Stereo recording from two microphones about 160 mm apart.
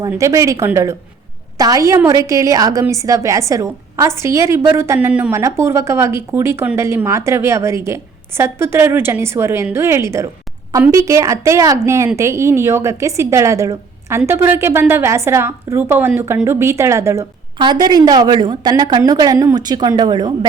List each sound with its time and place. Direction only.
0.1 s a woman's voice: 20° right (ahead or behind)